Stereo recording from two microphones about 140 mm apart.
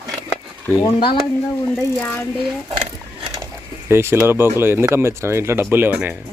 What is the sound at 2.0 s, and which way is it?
Speech, 10° left (ahead or behind).